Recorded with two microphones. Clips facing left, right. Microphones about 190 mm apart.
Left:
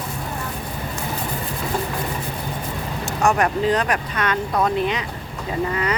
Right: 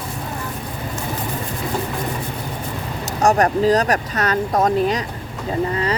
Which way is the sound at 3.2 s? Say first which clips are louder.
Right 4 dB; 40° right (ahead or behind).